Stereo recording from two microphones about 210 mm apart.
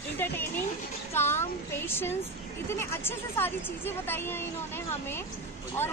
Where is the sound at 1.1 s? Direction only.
10° left (ahead or behind).